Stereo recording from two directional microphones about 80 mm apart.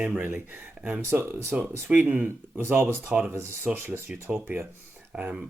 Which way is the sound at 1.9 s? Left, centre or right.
Centre.